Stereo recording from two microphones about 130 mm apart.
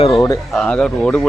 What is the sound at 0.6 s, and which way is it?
Speech, 5° left (ahead or behind).